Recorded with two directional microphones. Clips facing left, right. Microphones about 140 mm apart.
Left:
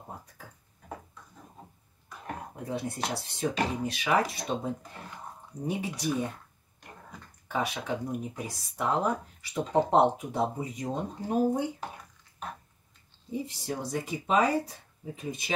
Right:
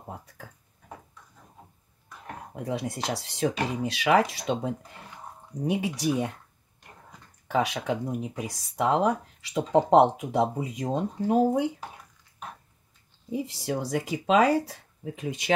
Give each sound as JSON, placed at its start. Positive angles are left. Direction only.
{"t": 2.6, "sound": "speech", "side_deg": -90}
{"t": 7.5, "sound": "speech", "side_deg": -90}
{"t": 13.5, "sound": "speech", "side_deg": -90}